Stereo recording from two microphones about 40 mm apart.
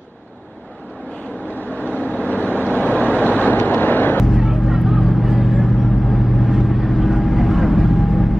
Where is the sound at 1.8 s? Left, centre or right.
Left.